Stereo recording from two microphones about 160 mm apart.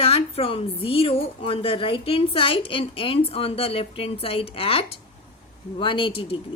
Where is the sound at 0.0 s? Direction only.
35° left (ahead or behind).